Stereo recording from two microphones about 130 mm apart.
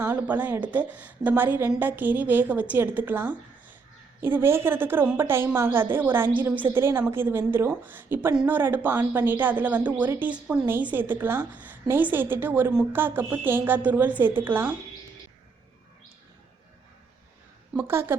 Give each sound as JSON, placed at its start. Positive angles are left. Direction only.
{"t": 0.0, "sound": "speech", "side_deg": -15}
{"t": 17.7, "sound": "speech", "side_deg": -15}